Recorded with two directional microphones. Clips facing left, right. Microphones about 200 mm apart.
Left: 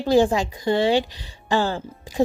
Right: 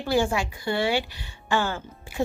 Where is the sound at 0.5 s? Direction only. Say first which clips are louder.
Left 7 dB; 20° left (ahead or behind).